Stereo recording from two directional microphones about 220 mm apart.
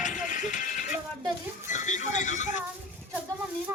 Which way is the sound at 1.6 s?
35° left (ahead or behind).